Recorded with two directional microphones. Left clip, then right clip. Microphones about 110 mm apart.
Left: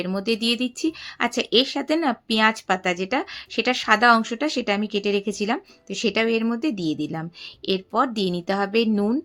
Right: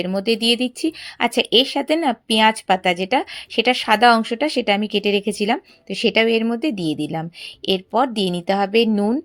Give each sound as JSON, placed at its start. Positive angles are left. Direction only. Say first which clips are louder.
{"t": 0.0, "sound": "speech", "louder": "right 5 dB", "side_deg": -30}